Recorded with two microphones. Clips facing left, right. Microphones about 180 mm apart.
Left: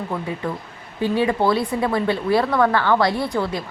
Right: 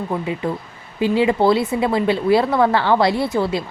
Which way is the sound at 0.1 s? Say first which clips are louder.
Right 5 dB; 20° right (ahead or behind).